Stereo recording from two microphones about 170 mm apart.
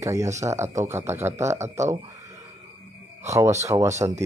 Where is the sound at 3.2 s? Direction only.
20° right (ahead or behind).